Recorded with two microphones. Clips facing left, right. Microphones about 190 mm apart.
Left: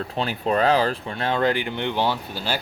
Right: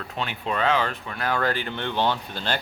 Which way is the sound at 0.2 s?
40° left (ahead or behind).